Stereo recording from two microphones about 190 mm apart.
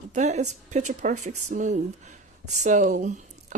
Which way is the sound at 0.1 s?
40° right (ahead or behind).